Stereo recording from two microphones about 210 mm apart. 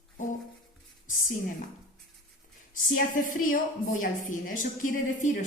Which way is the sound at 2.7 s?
40° left (ahead or behind).